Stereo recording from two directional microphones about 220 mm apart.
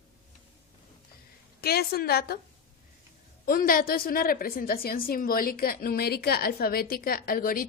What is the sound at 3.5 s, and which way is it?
Speech, 40° left (ahead or behind).